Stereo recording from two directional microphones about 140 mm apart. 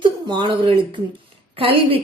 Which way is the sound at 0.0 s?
35° right (ahead or behind).